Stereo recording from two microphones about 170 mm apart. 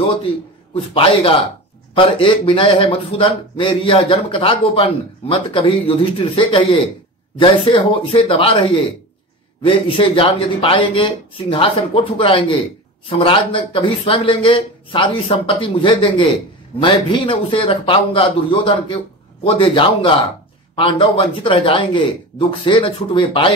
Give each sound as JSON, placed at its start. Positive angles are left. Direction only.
{"t": 0.7, "sound": "a man's voice", "side_deg": 30}